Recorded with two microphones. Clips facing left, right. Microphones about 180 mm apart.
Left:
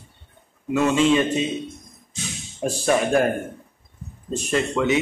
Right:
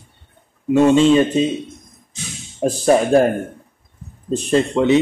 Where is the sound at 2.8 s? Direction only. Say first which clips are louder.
Right 6 dB; 35° right (ahead or behind).